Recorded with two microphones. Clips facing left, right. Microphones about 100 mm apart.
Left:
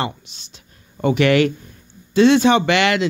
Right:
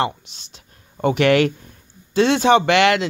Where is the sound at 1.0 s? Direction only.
60° right (ahead or behind).